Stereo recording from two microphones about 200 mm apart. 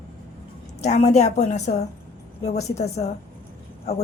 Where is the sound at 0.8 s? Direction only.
35° left (ahead or behind).